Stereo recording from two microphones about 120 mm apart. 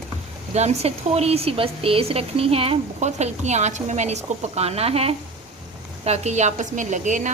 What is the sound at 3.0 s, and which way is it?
A woman's voice, 70° right (ahead or behind).